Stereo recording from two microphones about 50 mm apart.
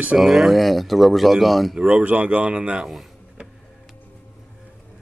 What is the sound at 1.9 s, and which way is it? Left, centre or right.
Speech, right.